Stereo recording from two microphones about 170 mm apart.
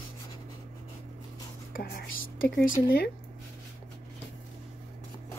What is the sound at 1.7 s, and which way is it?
Whispering, 55° left (ahead or behind).